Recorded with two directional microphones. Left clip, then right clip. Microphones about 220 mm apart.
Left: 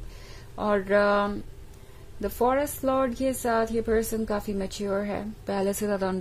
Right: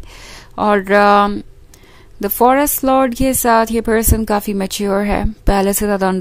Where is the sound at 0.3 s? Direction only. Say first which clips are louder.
Right 12 dB; 35° right (ahead or behind).